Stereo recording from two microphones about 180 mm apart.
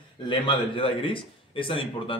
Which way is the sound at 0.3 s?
25° left (ahead or behind).